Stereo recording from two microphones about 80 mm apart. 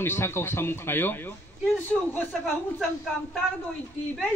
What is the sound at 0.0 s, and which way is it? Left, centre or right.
A man's voice, left.